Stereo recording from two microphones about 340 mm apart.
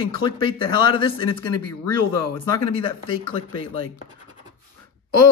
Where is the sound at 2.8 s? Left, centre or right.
Centre.